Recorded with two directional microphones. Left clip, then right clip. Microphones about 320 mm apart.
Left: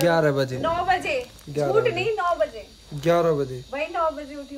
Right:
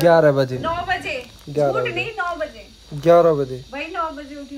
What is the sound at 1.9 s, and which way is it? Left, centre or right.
Speech, left.